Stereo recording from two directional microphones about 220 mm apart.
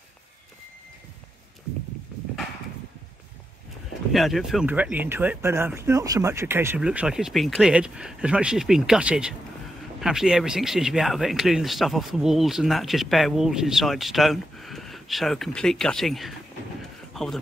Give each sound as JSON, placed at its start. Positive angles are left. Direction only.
{"t": 4.1, "sound": "speech", "side_deg": 0}